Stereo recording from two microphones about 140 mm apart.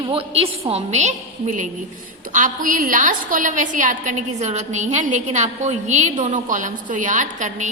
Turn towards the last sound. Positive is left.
turn(degrees=-65)  # may be behind; listen again after turning